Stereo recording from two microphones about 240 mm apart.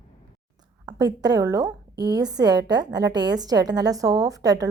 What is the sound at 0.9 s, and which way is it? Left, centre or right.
A woman's voice, centre.